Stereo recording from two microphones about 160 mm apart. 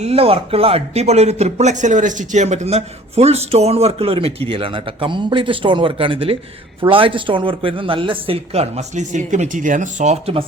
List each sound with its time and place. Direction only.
0.0 s a man's voice: 40° right (ahead or behind)